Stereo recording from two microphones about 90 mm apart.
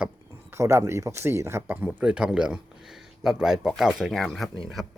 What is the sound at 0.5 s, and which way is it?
Speech, 30° right (ahead or behind).